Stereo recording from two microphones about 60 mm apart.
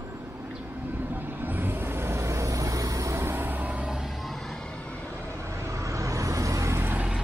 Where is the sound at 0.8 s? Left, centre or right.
Right.